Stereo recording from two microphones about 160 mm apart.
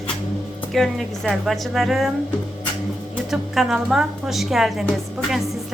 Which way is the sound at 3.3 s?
Centre (ahead or behind).